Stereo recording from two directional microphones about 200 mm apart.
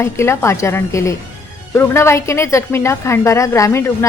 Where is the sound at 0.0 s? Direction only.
15° left (ahead or behind).